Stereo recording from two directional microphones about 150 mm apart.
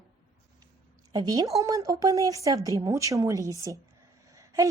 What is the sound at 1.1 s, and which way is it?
A woman's voice, 25° right (ahead or behind).